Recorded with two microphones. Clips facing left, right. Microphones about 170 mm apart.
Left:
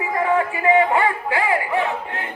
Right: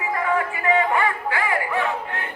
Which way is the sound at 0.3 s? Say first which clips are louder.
Left 5 dB; 25° left (ahead or behind).